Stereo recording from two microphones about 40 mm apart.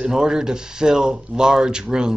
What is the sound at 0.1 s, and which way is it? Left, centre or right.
Speech, centre.